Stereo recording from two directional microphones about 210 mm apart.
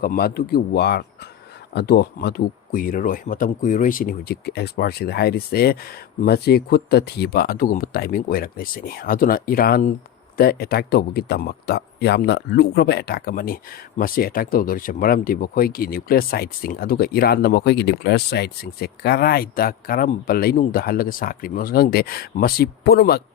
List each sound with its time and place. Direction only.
0.0 s speech: 45° left (ahead or behind)